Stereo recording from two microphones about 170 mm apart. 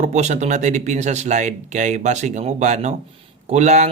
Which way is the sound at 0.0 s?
45° right (ahead or behind).